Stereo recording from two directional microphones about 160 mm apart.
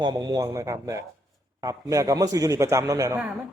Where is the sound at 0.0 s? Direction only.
25° right (ahead or behind).